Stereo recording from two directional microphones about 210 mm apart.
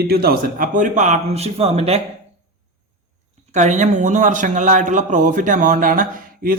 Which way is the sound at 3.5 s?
35° right (ahead or behind).